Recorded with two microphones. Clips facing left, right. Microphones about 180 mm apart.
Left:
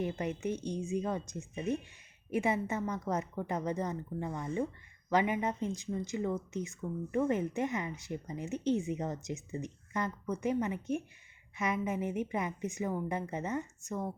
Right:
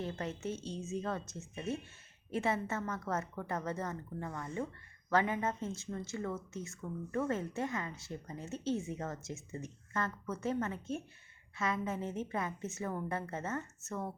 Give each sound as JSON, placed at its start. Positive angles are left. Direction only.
{"t": 0.0, "sound": "a woman's voice", "side_deg": 15}